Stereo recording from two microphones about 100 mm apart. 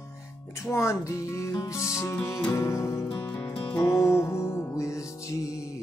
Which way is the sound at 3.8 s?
30° left (ahead or behind).